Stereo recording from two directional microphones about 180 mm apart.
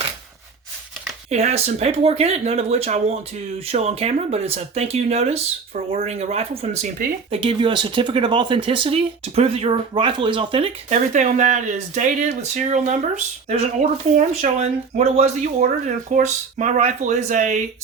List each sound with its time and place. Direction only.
1.3 s speech: 35° right (ahead or behind)
10.8 s speech: 45° right (ahead or behind)